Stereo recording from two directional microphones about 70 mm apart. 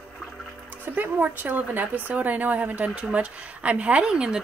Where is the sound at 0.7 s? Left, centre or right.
Right.